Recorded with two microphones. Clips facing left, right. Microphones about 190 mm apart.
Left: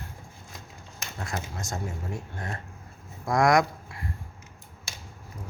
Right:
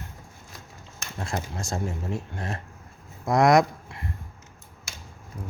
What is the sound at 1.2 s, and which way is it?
Speech, 30° right (ahead or behind).